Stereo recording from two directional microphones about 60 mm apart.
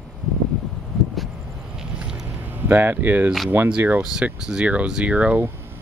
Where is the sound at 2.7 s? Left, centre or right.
Right.